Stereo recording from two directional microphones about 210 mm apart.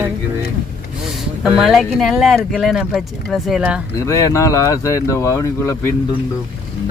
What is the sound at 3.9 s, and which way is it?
Speech, 15° left (ahead or behind).